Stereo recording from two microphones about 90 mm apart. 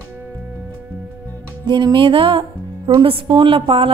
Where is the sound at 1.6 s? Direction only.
55° right (ahead or behind).